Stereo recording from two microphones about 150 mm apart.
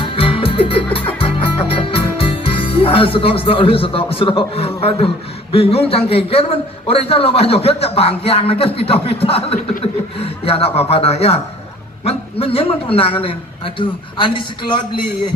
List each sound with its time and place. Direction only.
0.0 s music: 35° left (ahead or behind)
12.0 s a man's voice: 40° left (ahead or behind)